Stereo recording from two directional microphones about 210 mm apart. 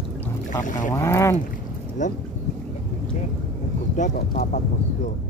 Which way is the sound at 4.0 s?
35° left (ahead or behind).